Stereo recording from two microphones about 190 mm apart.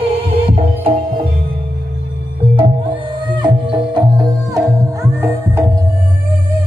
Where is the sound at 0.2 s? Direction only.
30° right (ahead or behind).